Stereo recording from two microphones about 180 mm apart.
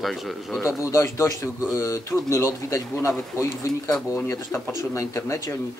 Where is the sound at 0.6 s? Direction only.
15° left (ahead or behind).